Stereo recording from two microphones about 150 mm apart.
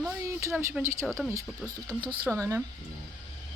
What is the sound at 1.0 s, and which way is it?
Speech, 5° left (ahead or behind).